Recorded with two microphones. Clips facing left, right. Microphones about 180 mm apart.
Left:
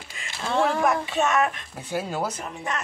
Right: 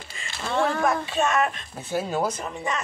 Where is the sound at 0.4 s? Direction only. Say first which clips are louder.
Left 1 dB; centre (ahead or behind).